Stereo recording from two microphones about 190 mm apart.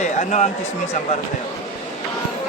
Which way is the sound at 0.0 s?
40° left (ahead or behind).